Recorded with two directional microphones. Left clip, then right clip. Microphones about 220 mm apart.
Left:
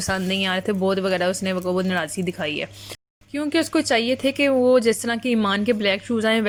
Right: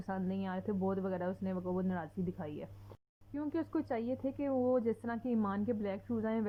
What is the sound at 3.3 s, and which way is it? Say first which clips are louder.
Speech: left 16 dB; 30° left (ahead or behind).